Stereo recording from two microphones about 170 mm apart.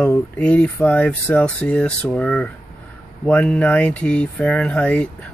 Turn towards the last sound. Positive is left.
turn(degrees=5)  # may be behind; listen again after turning